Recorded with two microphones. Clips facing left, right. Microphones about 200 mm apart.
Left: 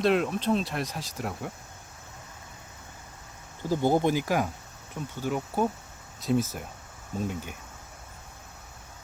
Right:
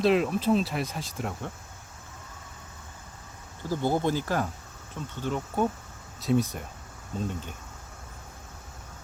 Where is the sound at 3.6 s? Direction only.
15° left (ahead or behind).